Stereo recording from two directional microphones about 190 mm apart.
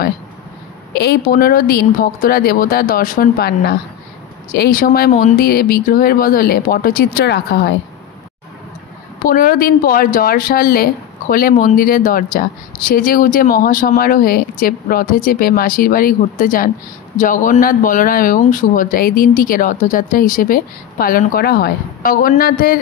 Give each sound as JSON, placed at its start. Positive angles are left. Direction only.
{"t": 1.0, "sound": "speech", "side_deg": 55}
{"t": 9.2, "sound": "speech", "side_deg": 45}